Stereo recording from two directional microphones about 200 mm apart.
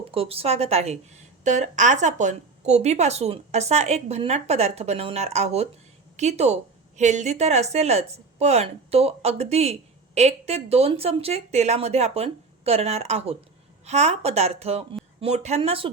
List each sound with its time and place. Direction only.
0.0 s a woman's voice: 30° right (ahead or behind)